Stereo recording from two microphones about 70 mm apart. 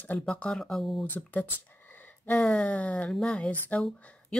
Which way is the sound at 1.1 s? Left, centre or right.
Left.